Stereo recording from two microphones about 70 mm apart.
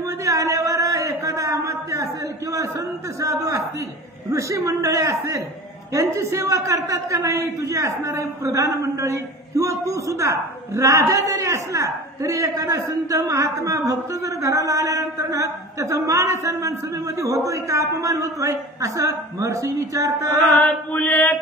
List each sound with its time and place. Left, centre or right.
0.0 s a sound: right
3.2 s a man's voice: right
20.4 s chant: left